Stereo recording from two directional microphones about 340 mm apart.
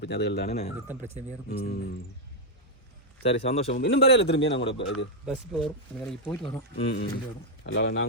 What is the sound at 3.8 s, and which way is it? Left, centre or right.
Speech, left.